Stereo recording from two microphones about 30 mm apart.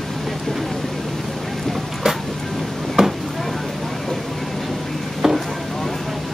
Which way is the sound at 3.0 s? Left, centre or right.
Centre.